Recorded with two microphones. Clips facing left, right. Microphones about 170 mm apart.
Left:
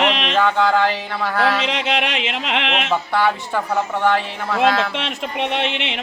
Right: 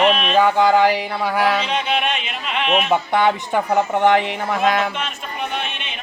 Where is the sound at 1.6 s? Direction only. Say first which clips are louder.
Even; 90° left.